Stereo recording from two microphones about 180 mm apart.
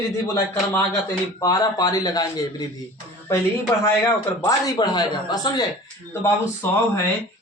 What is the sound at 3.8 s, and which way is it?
A man's voice, 20° left (ahead or behind).